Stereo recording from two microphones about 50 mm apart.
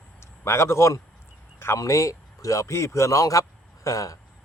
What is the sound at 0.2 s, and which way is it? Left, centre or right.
A man's voice, left.